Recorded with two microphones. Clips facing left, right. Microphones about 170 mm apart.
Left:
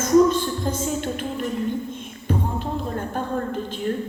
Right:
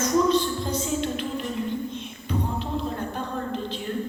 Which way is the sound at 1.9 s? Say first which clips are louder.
Left 3 dB; 50° left (ahead or behind).